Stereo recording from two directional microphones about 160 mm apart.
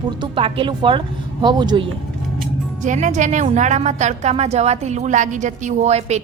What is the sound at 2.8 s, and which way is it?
A woman's voice, 50° right (ahead or behind).